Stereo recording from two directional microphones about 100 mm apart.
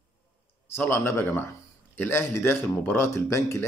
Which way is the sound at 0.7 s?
20° left (ahead or behind).